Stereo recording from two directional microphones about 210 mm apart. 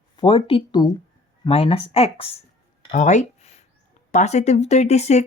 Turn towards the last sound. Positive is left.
turn(degrees=30)  # may be behind; listen again after turning